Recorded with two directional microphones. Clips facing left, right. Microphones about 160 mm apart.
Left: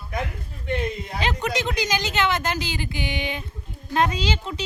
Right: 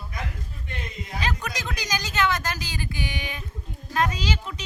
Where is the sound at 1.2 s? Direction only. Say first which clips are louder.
Left 6 dB; 25° left (ahead or behind).